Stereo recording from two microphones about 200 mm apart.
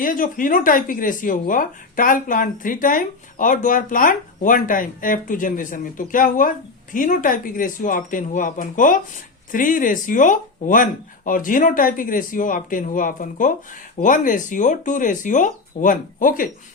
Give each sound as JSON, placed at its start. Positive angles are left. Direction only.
{"t": 0.0, "sound": "speech", "side_deg": 40}